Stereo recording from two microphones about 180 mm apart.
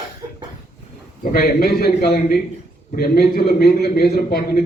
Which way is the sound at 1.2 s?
55° left (ahead or behind).